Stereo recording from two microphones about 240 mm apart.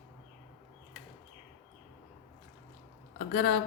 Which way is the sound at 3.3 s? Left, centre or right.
Left.